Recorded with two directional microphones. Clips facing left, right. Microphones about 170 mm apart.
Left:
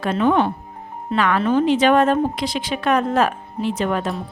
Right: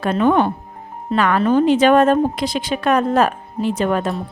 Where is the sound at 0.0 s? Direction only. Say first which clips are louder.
Right 2 dB; 45° right (ahead or behind).